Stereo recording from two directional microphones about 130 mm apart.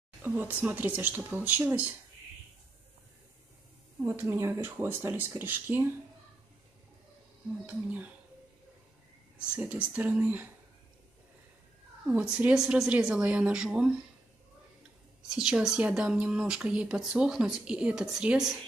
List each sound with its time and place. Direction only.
0.2 s speech: 15° right (ahead or behind)
4.0 s speech: 20° right (ahead or behind)
7.6 s speech: 10° right (ahead or behind)
9.6 s speech: 10° right (ahead or behind)
12.1 s speech: 10° right (ahead or behind)
15.2 s speech: 5° right (ahead or behind)